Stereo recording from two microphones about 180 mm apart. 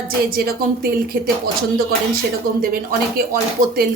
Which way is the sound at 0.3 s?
55° right (ahead or behind).